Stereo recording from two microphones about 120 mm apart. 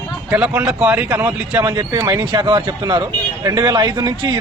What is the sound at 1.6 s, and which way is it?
A man's voice, 40° right (ahead or behind).